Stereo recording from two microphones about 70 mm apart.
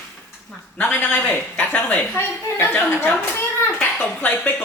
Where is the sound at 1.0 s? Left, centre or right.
Left.